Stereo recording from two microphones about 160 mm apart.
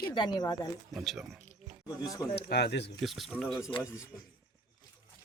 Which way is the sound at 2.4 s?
90° left.